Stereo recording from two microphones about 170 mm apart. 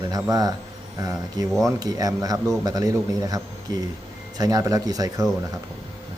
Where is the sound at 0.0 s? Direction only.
20° right (ahead or behind).